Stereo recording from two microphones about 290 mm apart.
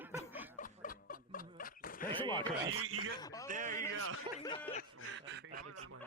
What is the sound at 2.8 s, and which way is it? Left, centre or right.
Speech, right.